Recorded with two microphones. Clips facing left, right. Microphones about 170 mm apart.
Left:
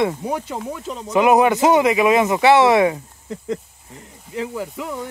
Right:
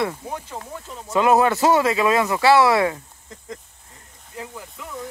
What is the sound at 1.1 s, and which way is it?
Speech, 20° left (ahead or behind).